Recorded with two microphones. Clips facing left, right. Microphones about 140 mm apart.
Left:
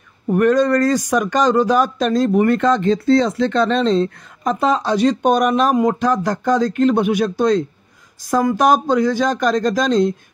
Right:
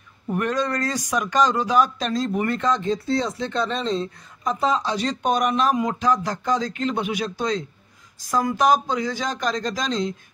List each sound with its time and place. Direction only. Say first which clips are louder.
0.3 s speech: left 10 dB; 45° left (ahead or behind)